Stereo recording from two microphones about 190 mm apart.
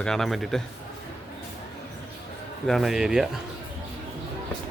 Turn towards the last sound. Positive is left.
turn(degrees=-5)  # may be behind; listen again after turning